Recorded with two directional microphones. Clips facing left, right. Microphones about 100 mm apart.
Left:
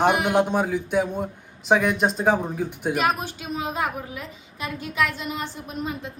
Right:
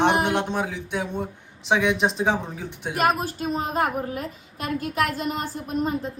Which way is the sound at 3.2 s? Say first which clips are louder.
Right 3 dB; 40° right (ahead or behind).